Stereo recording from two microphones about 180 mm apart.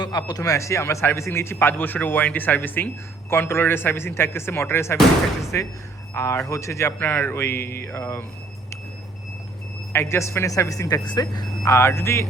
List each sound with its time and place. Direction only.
0.0 s a man's voice: 20° left (ahead or behind)
9.9 s a man's voice: 15° left (ahead or behind)